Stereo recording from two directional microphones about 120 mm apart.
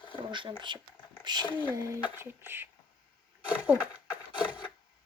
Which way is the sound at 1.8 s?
25° right (ahead or behind).